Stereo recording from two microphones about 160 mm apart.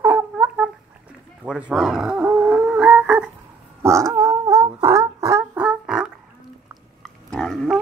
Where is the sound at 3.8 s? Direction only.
20° right (ahead or behind).